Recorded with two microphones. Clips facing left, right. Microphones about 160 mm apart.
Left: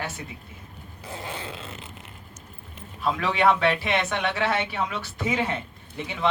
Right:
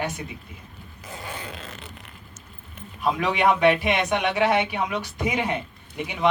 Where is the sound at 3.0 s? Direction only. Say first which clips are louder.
Right 1 dB; 15° right (ahead or behind).